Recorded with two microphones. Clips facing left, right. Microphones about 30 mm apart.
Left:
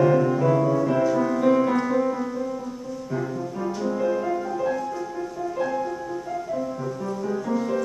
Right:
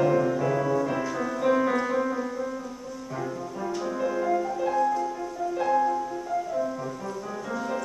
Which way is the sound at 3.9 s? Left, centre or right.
Centre.